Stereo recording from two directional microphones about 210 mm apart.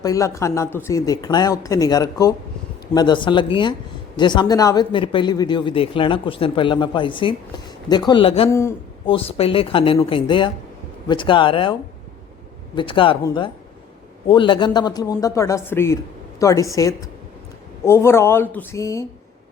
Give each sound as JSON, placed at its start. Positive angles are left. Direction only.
{"t": 0.0, "sound": "speech", "side_deg": 15}
{"t": 8.4, "sound": "speech", "side_deg": 15}
{"t": 9.0, "sound": "speech", "side_deg": 25}